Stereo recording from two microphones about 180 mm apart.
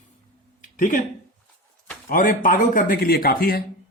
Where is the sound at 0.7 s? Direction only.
45° left (ahead or behind).